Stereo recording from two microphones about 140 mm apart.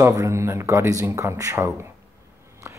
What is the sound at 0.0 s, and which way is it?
Speech, 20° right (ahead or behind).